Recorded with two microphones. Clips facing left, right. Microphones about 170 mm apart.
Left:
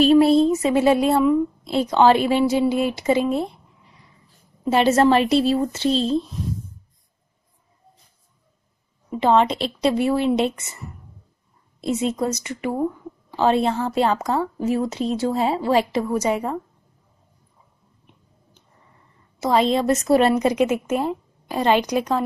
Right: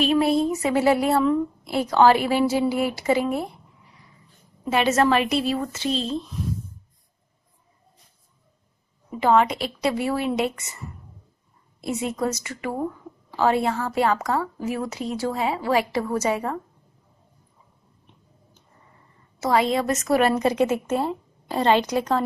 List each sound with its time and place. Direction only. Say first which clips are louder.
0.0 s a woman's voice: left 6 dB; 30° left (ahead or behind)
4.6 s a woman's voice: left 4 dB; 30° left (ahead or behind)
9.1 s a woman's voice: left 2 dB; 25° left (ahead or behind)
11.9 s a woman's voice: left 3 dB; 20° left (ahead or behind)
19.4 s a woman's voice: left 3 dB; 25° left (ahead or behind)